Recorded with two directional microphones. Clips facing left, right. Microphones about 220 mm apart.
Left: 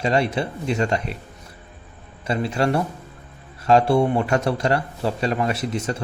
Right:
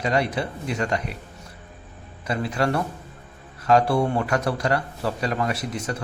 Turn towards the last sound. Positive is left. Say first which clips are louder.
# left 3 dB
turn(degrees=25)  # may be behind; listen again after turning